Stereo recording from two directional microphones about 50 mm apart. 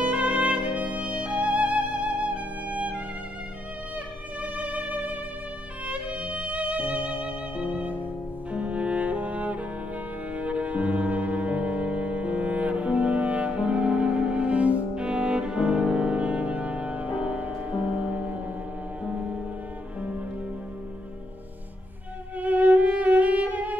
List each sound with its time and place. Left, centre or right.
0.0 s music: right
4.4 s music: right
22.4 s violin: right